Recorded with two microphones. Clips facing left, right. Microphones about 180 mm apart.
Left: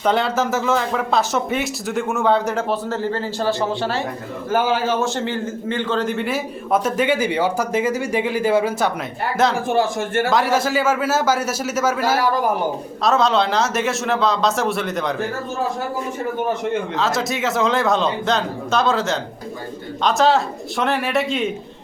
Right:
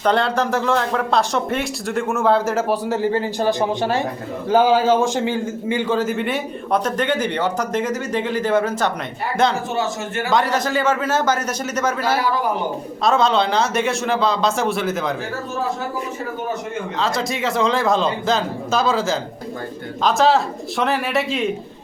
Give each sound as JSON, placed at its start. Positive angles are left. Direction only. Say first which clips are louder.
{"t": 0.0, "sound": "a man's voice", "louder": "right 1 dB", "side_deg": 5}
{"t": 12.1, "sound": "a man's voice", "louder": "left 1 dB", "side_deg": 45}
{"t": 13.1, "sound": "a man's voice", "louder": "even", "side_deg": 0}
{"t": 17.0, "sound": "a man's voice", "louder": "right 3 dB", "side_deg": 0}